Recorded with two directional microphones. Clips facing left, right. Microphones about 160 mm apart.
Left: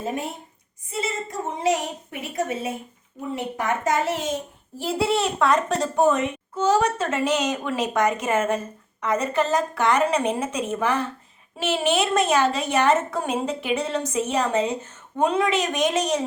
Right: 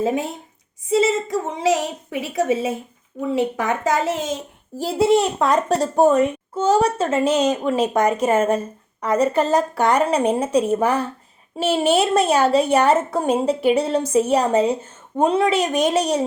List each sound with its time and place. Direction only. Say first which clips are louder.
0.0 s a woman's voice: right 7 dB; 90° right
4.8 s a child's voice: right 6 dB; 40° right (ahead or behind)